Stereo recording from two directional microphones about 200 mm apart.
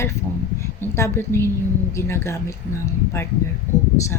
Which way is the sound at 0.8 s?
10° left (ahead or behind).